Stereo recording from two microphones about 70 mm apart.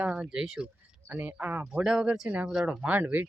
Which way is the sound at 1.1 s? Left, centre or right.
Right.